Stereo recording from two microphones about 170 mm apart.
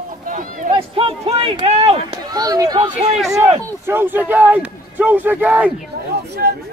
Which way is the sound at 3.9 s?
10° right (ahead or behind).